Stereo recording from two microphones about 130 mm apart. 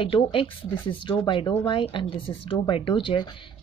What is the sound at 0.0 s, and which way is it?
Speech, 45° left (ahead or behind).